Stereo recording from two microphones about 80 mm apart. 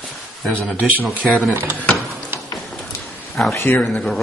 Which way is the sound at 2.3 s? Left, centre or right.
Right.